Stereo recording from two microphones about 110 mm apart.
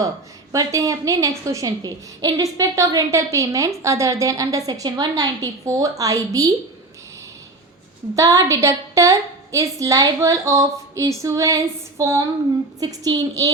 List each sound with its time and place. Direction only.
0.5 s a woman's voice: 30° right (ahead or behind)
8.1 s a woman's voice: 30° right (ahead or behind)
12.8 s a woman's voice: 40° right (ahead or behind)